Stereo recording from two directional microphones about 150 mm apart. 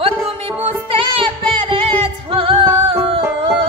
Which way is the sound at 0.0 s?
35° right (ahead or behind).